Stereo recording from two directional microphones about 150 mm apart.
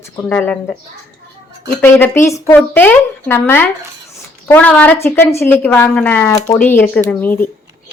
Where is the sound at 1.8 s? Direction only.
15° left (ahead or behind).